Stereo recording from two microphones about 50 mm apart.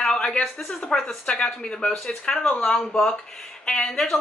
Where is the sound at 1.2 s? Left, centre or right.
Left.